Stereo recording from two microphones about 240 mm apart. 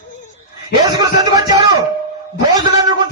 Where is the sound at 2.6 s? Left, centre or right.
Centre.